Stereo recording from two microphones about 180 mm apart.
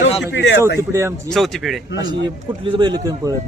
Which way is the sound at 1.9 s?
25° right (ahead or behind).